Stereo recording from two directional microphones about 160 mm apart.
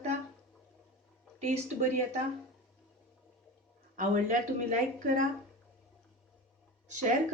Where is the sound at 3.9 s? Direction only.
55° right (ahead or behind).